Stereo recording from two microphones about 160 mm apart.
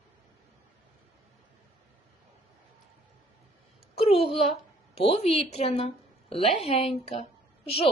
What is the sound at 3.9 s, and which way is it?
A woman's voice, 40° left (ahead or behind).